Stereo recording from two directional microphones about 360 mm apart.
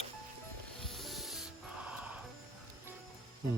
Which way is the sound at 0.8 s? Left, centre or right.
Centre.